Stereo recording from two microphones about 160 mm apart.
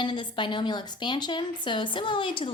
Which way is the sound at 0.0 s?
30° left (ahead or behind).